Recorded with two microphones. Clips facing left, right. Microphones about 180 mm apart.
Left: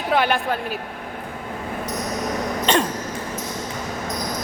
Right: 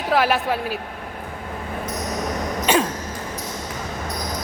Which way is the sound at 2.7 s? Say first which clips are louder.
Right 1 dB; 10° right (ahead or behind).